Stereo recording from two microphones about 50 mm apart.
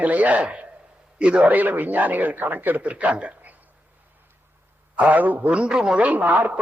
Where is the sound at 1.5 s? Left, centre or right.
Right.